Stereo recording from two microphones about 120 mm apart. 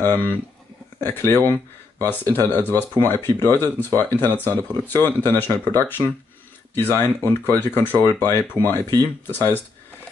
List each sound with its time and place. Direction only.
0.0 s speech: 20° left (ahead or behind)